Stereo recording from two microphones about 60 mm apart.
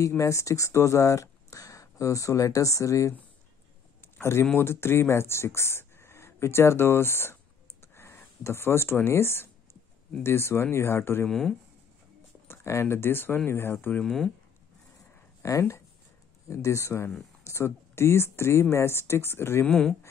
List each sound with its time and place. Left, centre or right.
0.2 s speech: left
4.2 s speech: left
7.9 s a sound: left
8.5 s speech: left
11.2 s speech: centre
12.4 s speech: left
14.0 s speech: centre
15.4 s speech: left
19.7 s speech: centre